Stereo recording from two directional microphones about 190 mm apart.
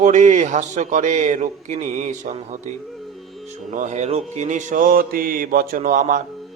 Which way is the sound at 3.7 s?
40° right (ahead or behind).